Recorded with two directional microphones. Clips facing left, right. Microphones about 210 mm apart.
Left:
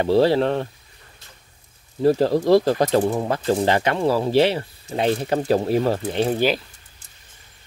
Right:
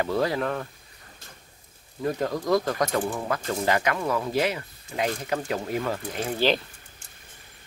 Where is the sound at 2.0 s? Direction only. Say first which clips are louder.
Left 10 dB; 30° left (ahead or behind).